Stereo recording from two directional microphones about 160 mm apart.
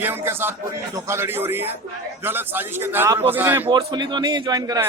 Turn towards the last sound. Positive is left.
turn(degrees=-25)  # may be behind; listen again after turning